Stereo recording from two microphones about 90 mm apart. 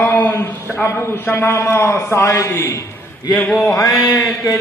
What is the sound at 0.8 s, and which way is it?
A man's voice, 30° left (ahead or behind).